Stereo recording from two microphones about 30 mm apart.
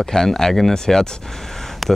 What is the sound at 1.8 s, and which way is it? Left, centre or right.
Speech, centre.